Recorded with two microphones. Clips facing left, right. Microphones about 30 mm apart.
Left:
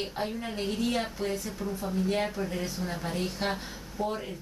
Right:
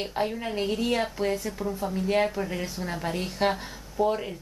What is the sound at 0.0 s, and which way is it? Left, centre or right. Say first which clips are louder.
A woman's voice: right 4 dB; centre.